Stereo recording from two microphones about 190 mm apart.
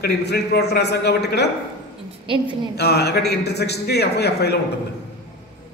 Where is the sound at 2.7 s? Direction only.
60° left (ahead or behind).